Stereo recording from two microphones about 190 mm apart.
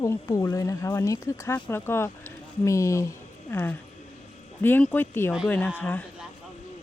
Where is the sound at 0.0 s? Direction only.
15° left (ahead or behind).